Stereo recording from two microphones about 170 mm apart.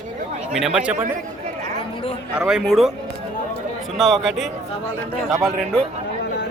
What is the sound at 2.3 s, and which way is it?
Speech, 5° right (ahead or behind).